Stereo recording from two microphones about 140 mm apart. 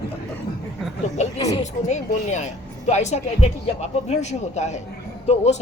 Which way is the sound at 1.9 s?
55° left (ahead or behind).